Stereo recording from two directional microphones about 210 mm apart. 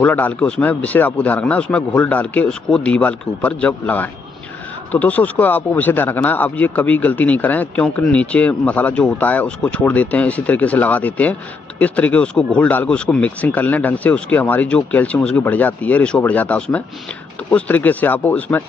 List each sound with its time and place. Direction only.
0.0 s speech: 5° left (ahead or behind)